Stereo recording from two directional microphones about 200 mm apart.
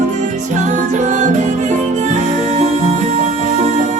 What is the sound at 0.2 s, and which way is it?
Music, 35° right (ahead or behind).